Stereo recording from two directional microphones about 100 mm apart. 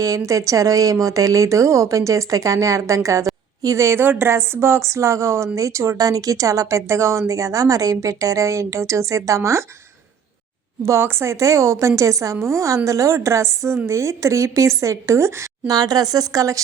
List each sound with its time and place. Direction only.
0.0 s speech: 35° right (ahead or behind)
10.8 s speech: 25° right (ahead or behind)